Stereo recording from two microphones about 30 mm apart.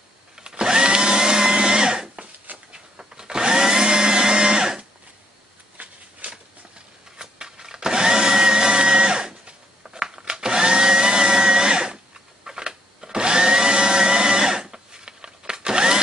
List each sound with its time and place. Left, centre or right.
0.4 s blender: right
5.8 s a sound: right
7.2 s blender: right